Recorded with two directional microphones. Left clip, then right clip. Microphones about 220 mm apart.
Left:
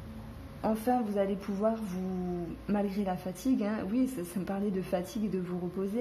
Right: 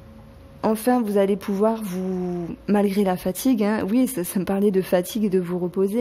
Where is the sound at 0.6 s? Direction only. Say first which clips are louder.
Right 9 dB; 45° right (ahead or behind).